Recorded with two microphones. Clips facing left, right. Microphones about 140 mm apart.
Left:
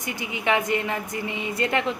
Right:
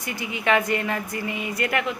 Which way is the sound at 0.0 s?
20° left (ahead or behind).